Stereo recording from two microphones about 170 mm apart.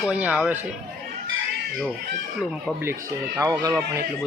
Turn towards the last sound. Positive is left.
turn(degrees=-20)  # may be behind; listen again after turning